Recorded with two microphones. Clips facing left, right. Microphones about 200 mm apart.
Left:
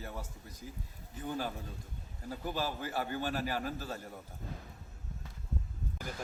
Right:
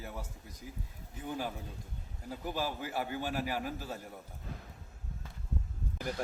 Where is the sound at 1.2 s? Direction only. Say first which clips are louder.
Left 1 dB; 15° right (ahead or behind).